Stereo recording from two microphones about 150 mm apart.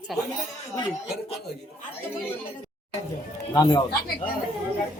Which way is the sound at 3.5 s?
25° left (ahead or behind).